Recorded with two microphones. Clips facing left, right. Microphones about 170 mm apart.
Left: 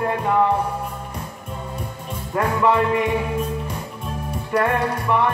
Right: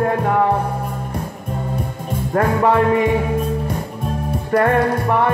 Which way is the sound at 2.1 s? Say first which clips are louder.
Right 5 dB; 50° right (ahead or behind).